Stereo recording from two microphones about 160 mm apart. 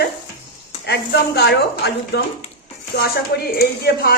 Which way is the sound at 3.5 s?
70° left (ahead or behind).